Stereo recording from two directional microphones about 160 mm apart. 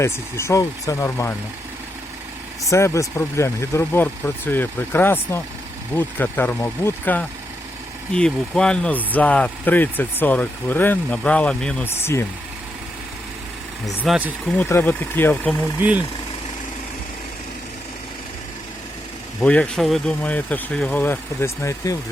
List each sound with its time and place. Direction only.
0.0 s speech: 15° left (ahead or behind)
2.6 s speech: 20° left (ahead or behind)
14.1 s speech: 10° right (ahead or behind)
14.6 s speech: 10° left (ahead or behind)
19.4 s speech: 10° left (ahead or behind)